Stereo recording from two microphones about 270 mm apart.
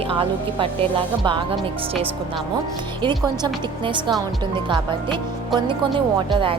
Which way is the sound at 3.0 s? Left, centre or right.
Centre.